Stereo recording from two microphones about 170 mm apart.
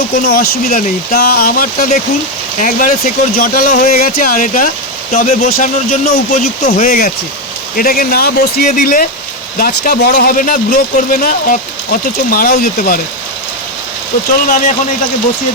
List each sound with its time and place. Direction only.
0.3 s speech: 65° left (ahead or behind)
14.4 s speech: 50° left (ahead or behind)